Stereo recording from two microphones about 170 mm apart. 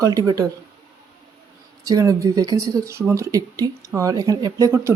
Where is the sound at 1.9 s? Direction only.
20° right (ahead or behind).